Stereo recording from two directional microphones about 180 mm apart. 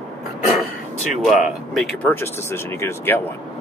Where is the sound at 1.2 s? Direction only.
Centre (ahead or behind).